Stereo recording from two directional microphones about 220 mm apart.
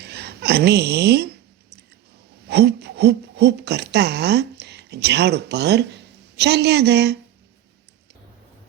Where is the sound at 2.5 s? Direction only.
45° right (ahead or behind).